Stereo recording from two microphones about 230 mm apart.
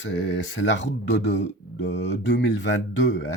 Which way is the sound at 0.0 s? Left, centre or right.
Left.